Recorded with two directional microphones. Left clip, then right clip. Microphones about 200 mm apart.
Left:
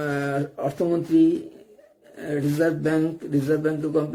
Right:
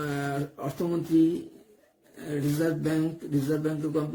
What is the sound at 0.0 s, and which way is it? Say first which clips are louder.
A man's voice: left 6 dB; 15° right (ahead or behind).